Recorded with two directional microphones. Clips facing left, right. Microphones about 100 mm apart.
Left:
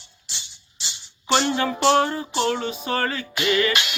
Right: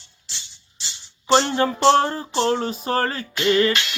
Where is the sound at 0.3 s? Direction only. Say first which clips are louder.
Left 1 dB; 15° left (ahead or behind).